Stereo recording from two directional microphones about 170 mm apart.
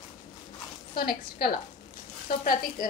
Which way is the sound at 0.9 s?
60° left (ahead or behind).